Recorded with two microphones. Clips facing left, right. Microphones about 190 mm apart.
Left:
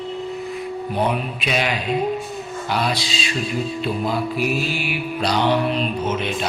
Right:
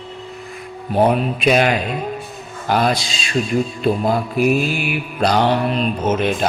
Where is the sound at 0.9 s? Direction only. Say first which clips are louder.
Right 8 dB; 45° right (ahead or behind).